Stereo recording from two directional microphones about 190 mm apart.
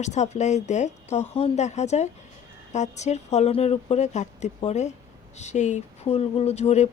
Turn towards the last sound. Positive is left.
turn(degrees=35)  # may be behind; listen again after turning